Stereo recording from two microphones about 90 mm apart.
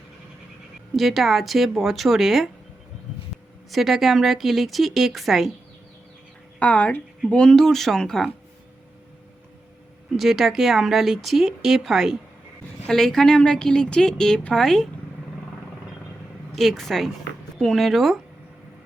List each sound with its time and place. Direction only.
0.9 s speech: centre (ahead or behind)
3.7 s speech: centre (ahead or behind)
6.6 s a woman's voice: 15° left (ahead or behind)
10.2 s a woman's voice: 5° right (ahead or behind)
16.6 s speech: centre (ahead or behind)